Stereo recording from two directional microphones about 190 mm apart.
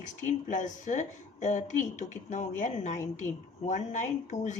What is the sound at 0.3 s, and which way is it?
A woman's voice, 40° left (ahead or behind).